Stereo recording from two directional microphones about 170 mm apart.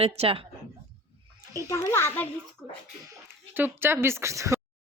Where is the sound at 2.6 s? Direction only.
Centre (ahead or behind).